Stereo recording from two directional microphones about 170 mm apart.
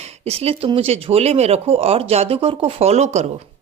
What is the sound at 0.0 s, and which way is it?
Speech, 40° right (ahead or behind).